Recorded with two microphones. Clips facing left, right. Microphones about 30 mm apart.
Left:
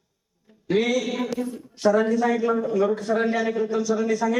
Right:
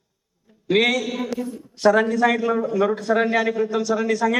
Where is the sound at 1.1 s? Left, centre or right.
Centre.